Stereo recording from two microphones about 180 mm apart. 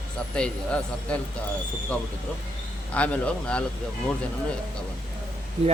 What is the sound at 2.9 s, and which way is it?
Speech, 5° left (ahead or behind).